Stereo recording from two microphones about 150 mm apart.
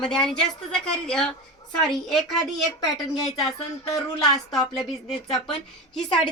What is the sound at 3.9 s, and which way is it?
Speech, 25° left (ahead or behind).